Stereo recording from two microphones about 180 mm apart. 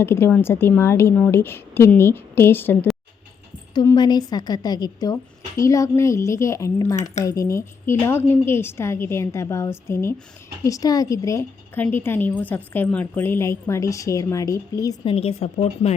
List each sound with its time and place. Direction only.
0.0 s a woman's voice: 10° left (ahead or behind)
3.8 s a woman's voice: 25° left (ahead or behind)
15.1 s speech: 35° left (ahead or behind)